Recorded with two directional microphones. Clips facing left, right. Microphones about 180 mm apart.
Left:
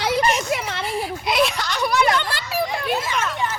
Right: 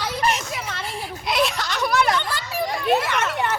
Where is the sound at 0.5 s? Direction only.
65° left (ahead or behind).